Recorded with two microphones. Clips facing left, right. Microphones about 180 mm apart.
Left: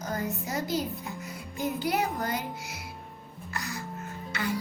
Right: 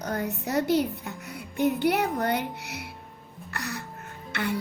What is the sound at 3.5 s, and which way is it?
Music, 65° right (ahead or behind).